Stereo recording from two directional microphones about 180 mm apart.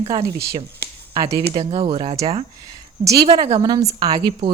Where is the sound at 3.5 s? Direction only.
20° right (ahead or behind).